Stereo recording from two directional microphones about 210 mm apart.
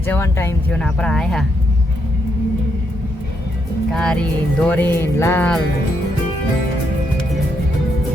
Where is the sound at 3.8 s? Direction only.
5° left (ahead or behind).